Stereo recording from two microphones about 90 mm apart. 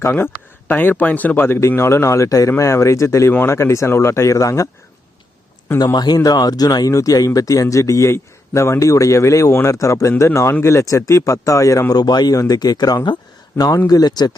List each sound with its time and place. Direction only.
0.0 s speech: 25° left (ahead or behind)
5.8 s speech: 50° left (ahead or behind)